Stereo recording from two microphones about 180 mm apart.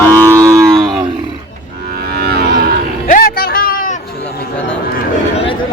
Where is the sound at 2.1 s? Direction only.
60° right (ahead or behind).